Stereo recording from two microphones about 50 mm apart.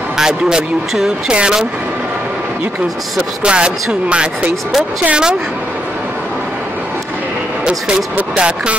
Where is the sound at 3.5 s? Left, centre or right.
Centre.